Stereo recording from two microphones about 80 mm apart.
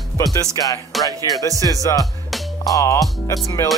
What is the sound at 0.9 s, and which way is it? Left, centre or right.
Music, centre.